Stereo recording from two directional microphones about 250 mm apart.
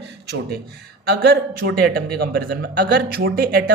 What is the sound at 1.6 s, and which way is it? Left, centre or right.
A man's voice, right.